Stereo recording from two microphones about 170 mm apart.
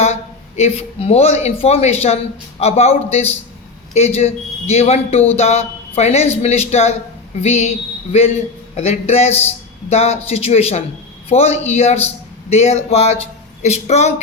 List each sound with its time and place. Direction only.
0.0 s a man's voice: 40° left (ahead or behind)
8.7 s a man's voice: 40° left (ahead or behind)